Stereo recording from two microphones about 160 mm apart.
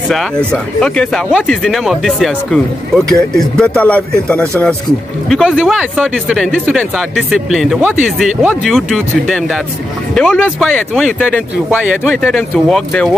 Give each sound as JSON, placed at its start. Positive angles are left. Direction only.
{"t": 0.1, "sound": "speech", "side_deg": 5}
{"t": 11.7, "sound": "speech", "side_deg": -10}
{"t": 12.2, "sound": "speech", "side_deg": 5}